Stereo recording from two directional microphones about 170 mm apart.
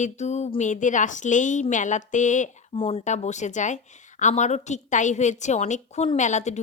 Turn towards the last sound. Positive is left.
turn(degrees=45)  # may be behind; listen again after turning